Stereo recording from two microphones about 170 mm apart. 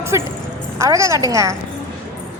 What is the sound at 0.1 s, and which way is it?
A woman's voice, 15° right (ahead or behind).